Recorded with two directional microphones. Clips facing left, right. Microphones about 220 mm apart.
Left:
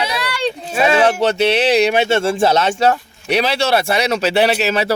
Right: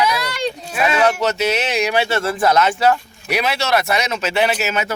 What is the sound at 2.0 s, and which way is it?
A man's voice, 25° left (ahead or behind).